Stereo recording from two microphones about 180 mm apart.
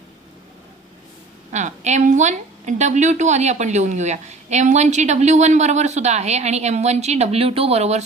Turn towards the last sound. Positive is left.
turn(degrees=-35)  # may be behind; listen again after turning